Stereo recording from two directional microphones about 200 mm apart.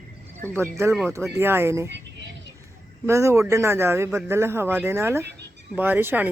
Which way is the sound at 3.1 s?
15° right (ahead or behind).